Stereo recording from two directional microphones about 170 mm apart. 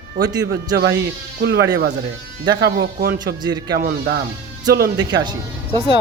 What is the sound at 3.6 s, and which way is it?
Speech, 80° right.